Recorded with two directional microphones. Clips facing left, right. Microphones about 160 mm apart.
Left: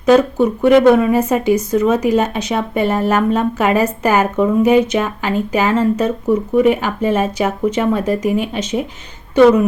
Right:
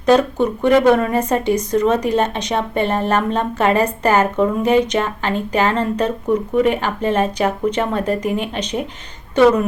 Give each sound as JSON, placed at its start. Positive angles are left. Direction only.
{"t": 0.0, "sound": "speech", "side_deg": 5}